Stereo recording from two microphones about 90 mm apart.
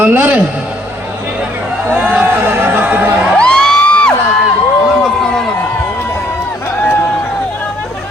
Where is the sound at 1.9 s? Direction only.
20° right (ahead or behind).